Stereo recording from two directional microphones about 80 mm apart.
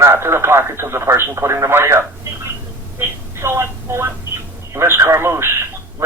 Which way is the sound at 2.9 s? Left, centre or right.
Right.